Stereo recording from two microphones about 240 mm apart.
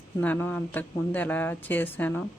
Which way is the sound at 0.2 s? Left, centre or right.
Centre.